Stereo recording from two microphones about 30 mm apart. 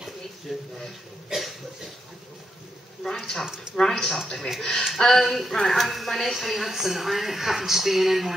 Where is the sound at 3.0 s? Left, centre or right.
Centre.